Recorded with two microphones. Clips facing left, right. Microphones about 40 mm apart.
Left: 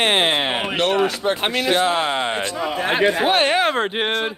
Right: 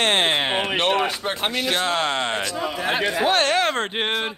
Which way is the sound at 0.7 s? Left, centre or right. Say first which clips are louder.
Left 2 dB; right.